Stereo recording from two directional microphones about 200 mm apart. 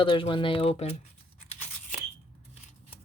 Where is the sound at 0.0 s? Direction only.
25° left (ahead or behind).